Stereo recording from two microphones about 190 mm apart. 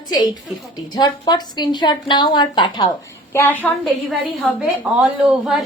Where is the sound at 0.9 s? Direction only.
25° left (ahead or behind).